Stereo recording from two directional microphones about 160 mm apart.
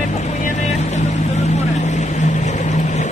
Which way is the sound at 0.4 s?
50° left (ahead or behind).